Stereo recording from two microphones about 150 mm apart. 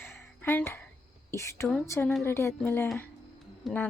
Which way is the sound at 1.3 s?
20° left (ahead or behind).